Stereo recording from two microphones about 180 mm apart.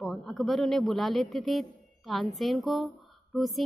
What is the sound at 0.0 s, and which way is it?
A man's voice, centre (ahead or behind).